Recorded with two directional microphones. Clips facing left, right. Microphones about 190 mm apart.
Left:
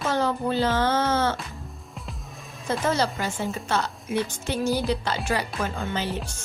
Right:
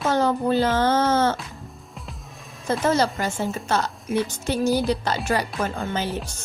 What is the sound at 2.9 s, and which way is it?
A woman's voice, 50° right (ahead or behind).